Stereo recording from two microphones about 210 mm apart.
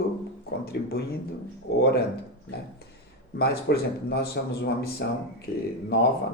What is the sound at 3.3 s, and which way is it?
Speech, 50° left (ahead or behind).